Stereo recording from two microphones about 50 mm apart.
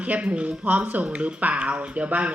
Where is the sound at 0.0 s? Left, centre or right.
Right.